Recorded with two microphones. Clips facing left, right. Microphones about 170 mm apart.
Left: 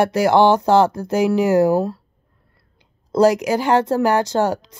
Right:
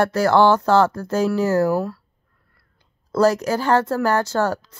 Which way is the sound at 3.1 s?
15° left (ahead or behind).